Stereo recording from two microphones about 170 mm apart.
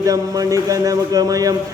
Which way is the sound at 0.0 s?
20° right (ahead or behind).